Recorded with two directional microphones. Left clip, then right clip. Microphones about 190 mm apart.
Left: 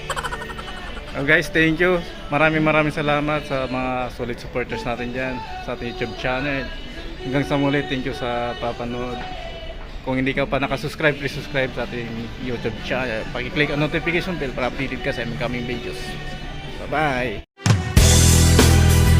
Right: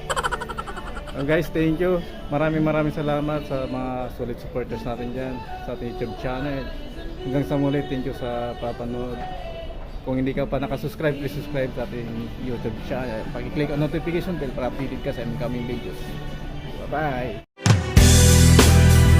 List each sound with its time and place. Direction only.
0.1 s a sound: centre (ahead or behind)
1.3 s a man's voice: 5° right (ahead or behind)
10.1 s a man's voice: 5° right (ahead or behind)
16.9 s speech: 15° left (ahead or behind)
17.6 s music: centre (ahead or behind)